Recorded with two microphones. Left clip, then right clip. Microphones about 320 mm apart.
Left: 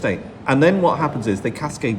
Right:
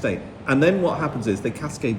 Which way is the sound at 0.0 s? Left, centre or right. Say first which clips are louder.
Left 3 dB; left.